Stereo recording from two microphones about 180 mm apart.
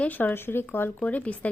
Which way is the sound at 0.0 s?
10° left (ahead or behind).